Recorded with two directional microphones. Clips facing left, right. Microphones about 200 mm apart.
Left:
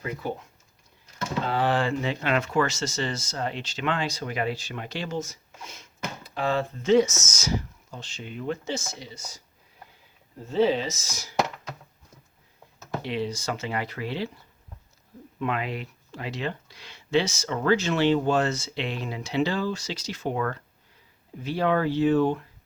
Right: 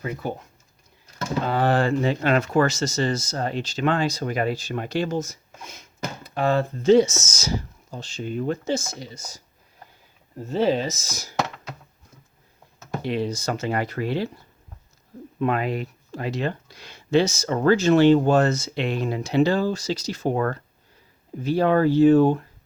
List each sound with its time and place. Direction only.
1.5 s speech: 45° right (ahead or behind)
10.5 s speech: 45° right (ahead or behind)
13.0 s speech: 45° right (ahead or behind)
15.4 s speech: 45° right (ahead or behind)